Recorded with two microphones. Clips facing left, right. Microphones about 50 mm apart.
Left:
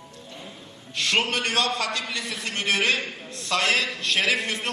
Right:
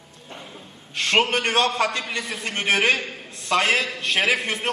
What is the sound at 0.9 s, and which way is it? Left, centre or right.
A man's voice, right.